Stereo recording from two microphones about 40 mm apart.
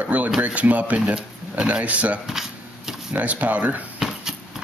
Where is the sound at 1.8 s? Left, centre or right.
Right.